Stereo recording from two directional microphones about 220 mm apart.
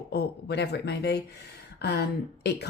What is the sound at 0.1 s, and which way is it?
A woman's voice, 50° left (ahead or behind).